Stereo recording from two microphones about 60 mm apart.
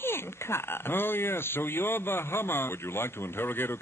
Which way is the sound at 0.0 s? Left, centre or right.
Left.